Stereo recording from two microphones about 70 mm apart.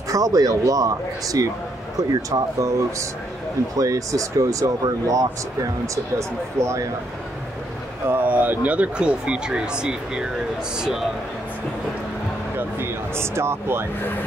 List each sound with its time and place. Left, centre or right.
0.1 s speech: right
6.1 s speech: right
8.1 s speech: right; by 11.1 s centre
12.5 s speech: right